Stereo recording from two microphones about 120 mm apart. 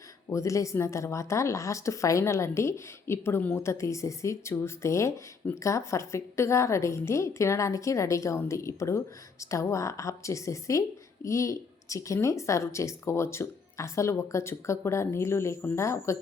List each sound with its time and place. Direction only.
0.3 s speech: 25° left (ahead or behind)